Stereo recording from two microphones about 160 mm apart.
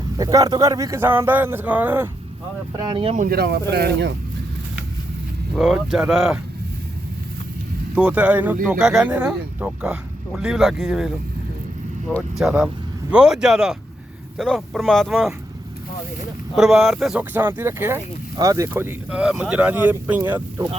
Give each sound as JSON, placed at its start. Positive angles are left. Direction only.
{"t": 0.2, "sound": "speech", "side_deg": -20}
{"t": 2.7, "sound": "speech", "side_deg": -30}
{"t": 3.2, "sound": "speech", "side_deg": -70}
{"t": 5.5, "sound": "speech", "side_deg": 0}
{"t": 7.9, "sound": "speech", "side_deg": -10}
{"t": 12.4, "sound": "speech", "side_deg": -5}
{"t": 16.6, "sound": "speech", "side_deg": 0}
{"t": 17.3, "sound": "speech", "side_deg": -15}